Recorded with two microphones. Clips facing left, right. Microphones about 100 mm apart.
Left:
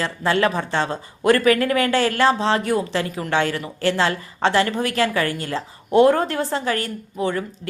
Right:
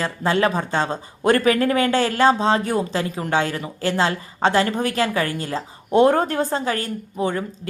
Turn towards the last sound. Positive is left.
turn(degrees=-30)  # may be behind; listen again after turning